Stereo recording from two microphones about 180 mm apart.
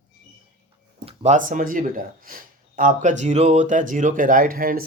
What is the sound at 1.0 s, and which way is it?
Speech, 40° right (ahead or behind).